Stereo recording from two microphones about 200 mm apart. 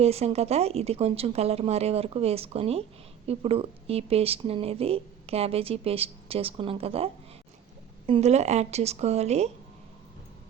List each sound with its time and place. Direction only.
0.0 s speech: 30° right (ahead or behind)